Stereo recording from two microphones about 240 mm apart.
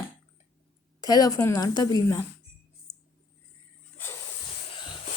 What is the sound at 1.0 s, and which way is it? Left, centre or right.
A woman's voice, centre.